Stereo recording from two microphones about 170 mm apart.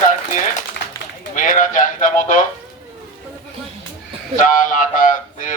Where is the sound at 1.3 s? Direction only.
50° left (ahead or behind).